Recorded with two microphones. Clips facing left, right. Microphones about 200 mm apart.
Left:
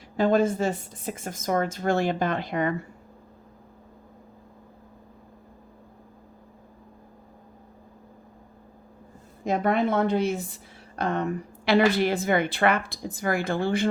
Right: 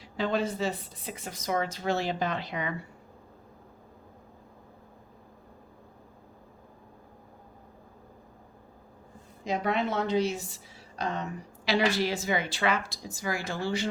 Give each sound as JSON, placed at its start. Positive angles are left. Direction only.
{"t": 0.2, "sound": "speech", "side_deg": 50}
{"t": 9.4, "sound": "a woman's voice", "side_deg": 50}